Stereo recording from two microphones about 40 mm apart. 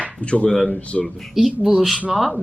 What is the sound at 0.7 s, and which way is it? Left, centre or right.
Speech, left.